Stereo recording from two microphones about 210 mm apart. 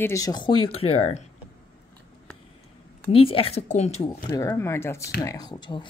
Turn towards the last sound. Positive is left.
turn(degrees=20)  # may be behind; listen again after turning